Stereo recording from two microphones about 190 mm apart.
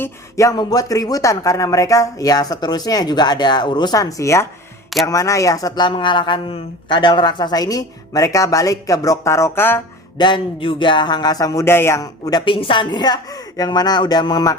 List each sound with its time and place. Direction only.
0.0 s speech: 15° left (ahead or behind)
10.2 s speech: 25° left (ahead or behind)